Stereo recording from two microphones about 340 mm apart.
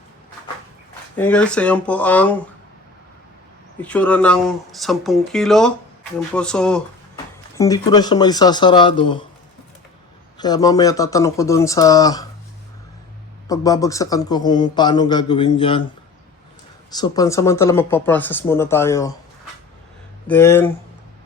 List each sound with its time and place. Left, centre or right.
1.1 s speech: centre
3.8 s a man's voice: centre
10.3 s a man's voice: centre
13.5 s a man's voice: centre
16.9 s a man's voice: centre
20.2 s a man's voice: centre